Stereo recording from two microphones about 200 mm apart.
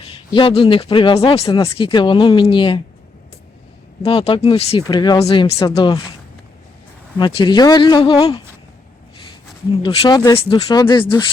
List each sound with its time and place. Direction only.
0.0 s speech: 25° left (ahead or behind)
4.0 s speech: 30° left (ahead or behind)
7.2 s speech: 20° left (ahead or behind)
9.8 s speech: 25° left (ahead or behind)